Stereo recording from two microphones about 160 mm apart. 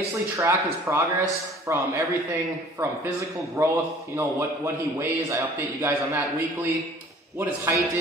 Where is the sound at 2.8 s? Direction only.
15° right (ahead or behind).